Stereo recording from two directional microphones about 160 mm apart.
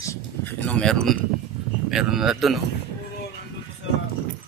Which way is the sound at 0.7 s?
5° left (ahead or behind).